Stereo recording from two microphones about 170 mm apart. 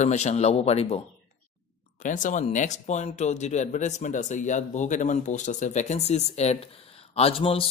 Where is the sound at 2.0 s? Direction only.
50° left (ahead or behind).